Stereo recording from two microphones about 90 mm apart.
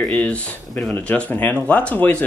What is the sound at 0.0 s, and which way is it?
A man's voice, 10° left (ahead or behind).